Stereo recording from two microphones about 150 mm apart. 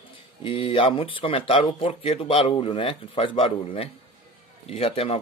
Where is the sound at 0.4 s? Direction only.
35° left (ahead or behind).